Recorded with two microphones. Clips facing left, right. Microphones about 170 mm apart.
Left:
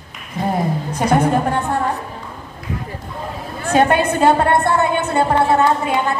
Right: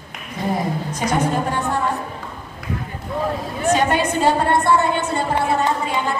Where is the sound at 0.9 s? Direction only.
55° left (ahead or behind).